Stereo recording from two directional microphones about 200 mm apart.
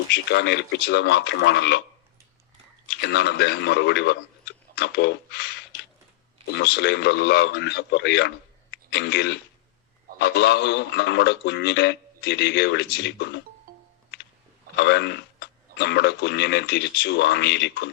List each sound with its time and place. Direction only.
0.1 s speech: 60° left (ahead or behind)
2.9 s speech: 55° left (ahead or behind)
13.7 s music: 45° right (ahead or behind)
14.8 s speech: 55° left (ahead or behind)